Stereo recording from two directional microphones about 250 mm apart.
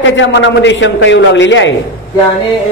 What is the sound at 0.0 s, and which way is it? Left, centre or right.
A man's voice, left.